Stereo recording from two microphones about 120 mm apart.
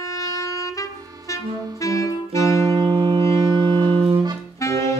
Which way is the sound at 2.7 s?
40° right (ahead or behind).